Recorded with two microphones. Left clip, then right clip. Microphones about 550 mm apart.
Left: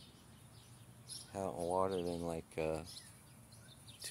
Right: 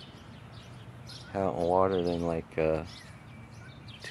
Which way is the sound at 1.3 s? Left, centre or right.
Left.